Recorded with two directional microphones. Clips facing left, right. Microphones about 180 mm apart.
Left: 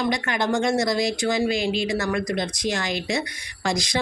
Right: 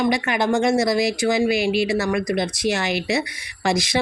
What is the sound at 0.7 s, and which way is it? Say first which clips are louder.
Speech: right 3 dB; 5° right (ahead or behind).